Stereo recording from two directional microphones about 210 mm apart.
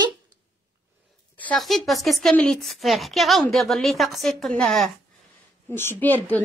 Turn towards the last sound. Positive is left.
turn(degrees=10)  # may be behind; listen again after turning